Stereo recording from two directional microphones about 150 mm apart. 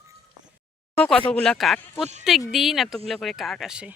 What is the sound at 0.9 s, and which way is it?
Speech, 10° left (ahead or behind).